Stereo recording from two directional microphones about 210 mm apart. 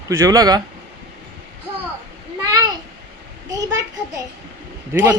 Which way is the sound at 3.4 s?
15° right (ahead or behind).